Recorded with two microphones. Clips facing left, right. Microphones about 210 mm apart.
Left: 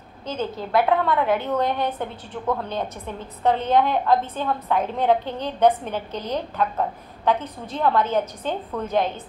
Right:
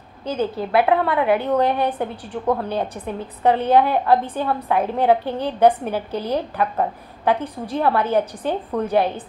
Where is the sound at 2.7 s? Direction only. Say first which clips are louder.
Right 4 dB; 30° right (ahead or behind).